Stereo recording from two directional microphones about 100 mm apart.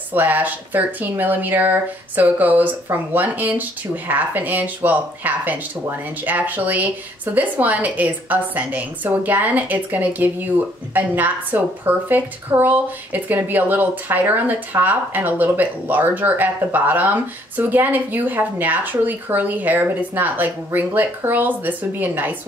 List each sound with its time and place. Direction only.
0.1 s a woman's voice: 20° right (ahead or behind)